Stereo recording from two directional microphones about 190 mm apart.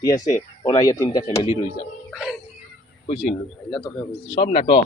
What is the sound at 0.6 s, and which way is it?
Speech, 20° left (ahead or behind).